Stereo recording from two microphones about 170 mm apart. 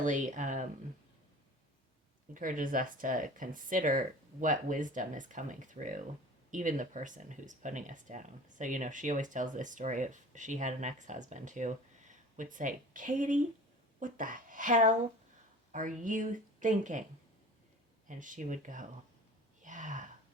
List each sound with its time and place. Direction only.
0.0 s speech: 45° right (ahead or behind)
2.3 s speech: 50° right (ahead or behind)
18.1 s speech: 50° right (ahead or behind)
19.6 s a sound: 50° right (ahead or behind)